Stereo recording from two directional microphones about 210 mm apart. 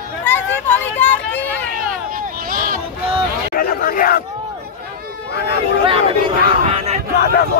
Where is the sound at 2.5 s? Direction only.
40° right (ahead or behind).